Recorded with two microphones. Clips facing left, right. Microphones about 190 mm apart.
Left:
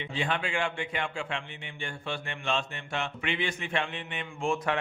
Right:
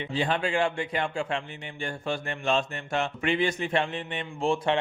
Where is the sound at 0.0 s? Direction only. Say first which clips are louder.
Right 4 dB; 35° right (ahead or behind).